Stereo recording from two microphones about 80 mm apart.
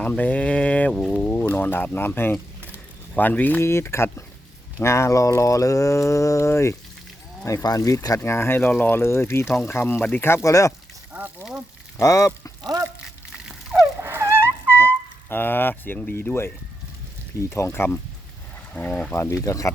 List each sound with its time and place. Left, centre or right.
0.0 s speech: centre
3.6 s speech: left
7.6 s speech: left
8.2 s speech: left
11.9 s a sound: left
13.3 s a sound: centre
14.0 s a sound: right
15.3 s speech: left
17.5 s speech: left
18.7 s speech: centre
19.1 s speech: left